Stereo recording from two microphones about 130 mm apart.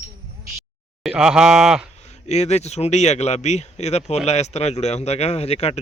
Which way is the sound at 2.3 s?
60° left (ahead or behind).